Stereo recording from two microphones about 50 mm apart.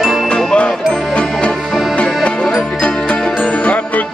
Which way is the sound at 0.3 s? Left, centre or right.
Centre.